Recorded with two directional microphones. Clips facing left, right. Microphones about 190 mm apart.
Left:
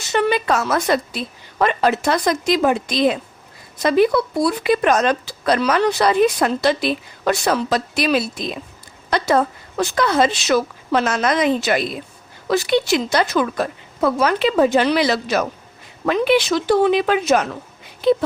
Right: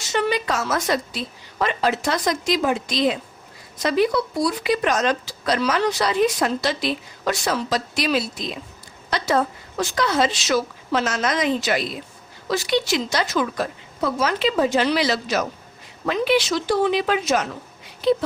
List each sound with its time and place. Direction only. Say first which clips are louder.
0.1 s speech: left 4 dB; 55° left (ahead or behind)